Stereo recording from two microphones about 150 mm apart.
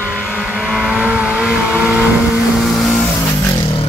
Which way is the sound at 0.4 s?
5° right (ahead or behind).